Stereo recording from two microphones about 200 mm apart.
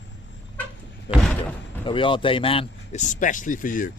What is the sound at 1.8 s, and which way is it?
Speech, 25° left (ahead or behind).